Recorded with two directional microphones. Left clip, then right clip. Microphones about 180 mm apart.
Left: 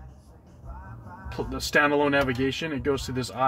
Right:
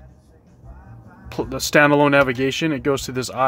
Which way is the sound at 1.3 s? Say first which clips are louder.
Right 7 dB; 40° right (ahead or behind).